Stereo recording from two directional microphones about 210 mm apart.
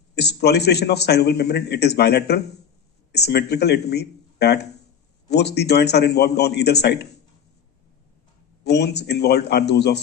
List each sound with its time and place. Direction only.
0.2 s a man's voice: 50° left (ahead or behind)
8.6 s a man's voice: 50° left (ahead or behind)